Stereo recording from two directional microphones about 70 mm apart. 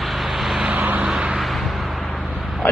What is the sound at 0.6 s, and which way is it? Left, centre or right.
Vehicle, right.